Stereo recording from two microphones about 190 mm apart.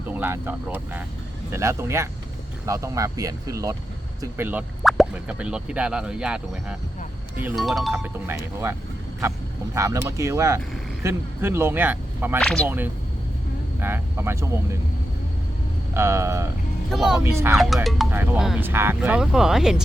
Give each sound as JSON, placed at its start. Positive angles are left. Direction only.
{"t": 0.1, "sound": "speech", "side_deg": -10}
{"t": 4.8, "sound": "speech", "side_deg": 0}
{"t": 7.9, "sound": "speech", "side_deg": -15}
{"t": 9.7, "sound": "speech", "side_deg": -15}
{"t": 12.4, "sound": "speech", "side_deg": 0}
{"t": 12.6, "sound": "speech", "side_deg": -10}
{"t": 16.0, "sound": "speech", "side_deg": -15}
{"t": 16.9, "sound": "speech", "side_deg": 0}
{"t": 17.8, "sound": "speech", "side_deg": 0}
{"t": 18.1, "sound": "speech", "side_deg": -10}